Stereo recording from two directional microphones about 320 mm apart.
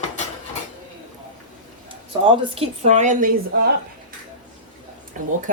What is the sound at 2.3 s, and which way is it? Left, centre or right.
Speech, centre.